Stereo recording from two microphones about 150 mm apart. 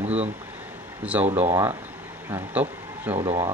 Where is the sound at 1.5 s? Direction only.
15° right (ahead or behind).